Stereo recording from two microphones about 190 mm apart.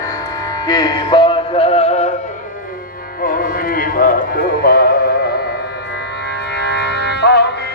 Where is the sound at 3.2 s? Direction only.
50° left (ahead or behind).